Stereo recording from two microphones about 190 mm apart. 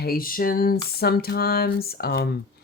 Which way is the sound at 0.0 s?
50° left (ahead or behind).